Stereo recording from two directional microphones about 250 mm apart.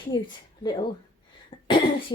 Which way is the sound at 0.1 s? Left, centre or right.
Centre.